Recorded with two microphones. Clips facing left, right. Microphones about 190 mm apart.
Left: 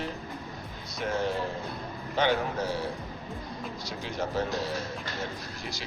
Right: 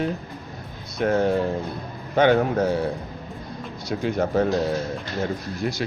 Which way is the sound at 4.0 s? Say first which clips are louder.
Right 9 dB; 55° right (ahead or behind).